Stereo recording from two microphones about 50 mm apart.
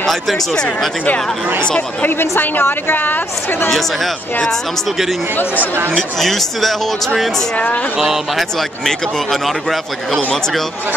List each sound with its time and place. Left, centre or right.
0.0 s a man's voice: centre
2.0 s a woman's voice: left
5.9 s speech: centre
7.5 s a woman's voice: left
8.0 s a man's voice: centre